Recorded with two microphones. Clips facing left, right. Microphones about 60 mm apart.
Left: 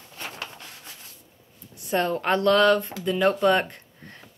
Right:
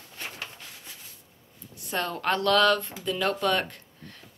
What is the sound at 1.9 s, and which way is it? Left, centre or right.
Speech, left.